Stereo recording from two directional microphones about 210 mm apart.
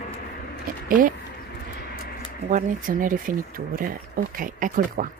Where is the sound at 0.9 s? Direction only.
40° right (ahead or behind).